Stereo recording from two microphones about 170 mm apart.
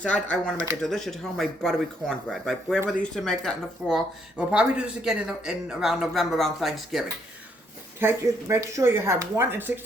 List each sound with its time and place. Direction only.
0.0 s speech: 5° left (ahead or behind)
0.5 s speech: 20° right (ahead or behind)
0.8 s speech: centre (ahead or behind)
7.9 s speech: 15° right (ahead or behind)